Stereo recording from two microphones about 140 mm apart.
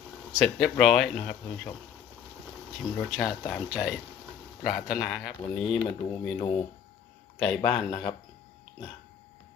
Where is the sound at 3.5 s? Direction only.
Centre (ahead or behind).